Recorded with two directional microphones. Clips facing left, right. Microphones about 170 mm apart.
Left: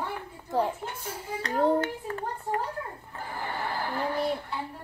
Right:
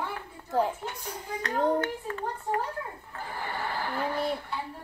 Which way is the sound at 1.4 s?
30° left (ahead or behind).